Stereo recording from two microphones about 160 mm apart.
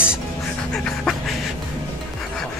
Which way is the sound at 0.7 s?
5° left (ahead or behind).